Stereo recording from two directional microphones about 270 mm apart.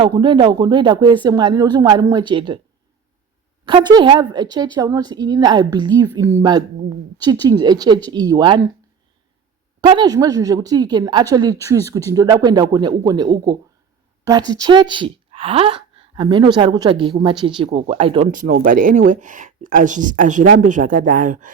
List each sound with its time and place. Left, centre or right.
0.0 s a woman's voice: centre
3.7 s a woman's voice: centre
9.8 s a woman's voice: centre